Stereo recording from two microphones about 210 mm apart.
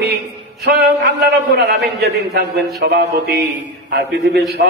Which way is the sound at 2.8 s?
50° right (ahead or behind).